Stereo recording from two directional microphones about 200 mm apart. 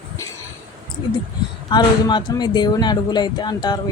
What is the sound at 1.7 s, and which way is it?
Speech, 20° left (ahead or behind).